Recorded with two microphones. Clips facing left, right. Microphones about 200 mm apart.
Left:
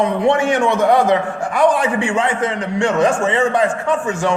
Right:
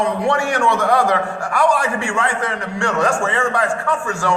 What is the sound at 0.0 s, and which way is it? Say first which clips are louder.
A man's voice: left 3 dB; 20° left (ahead or behind).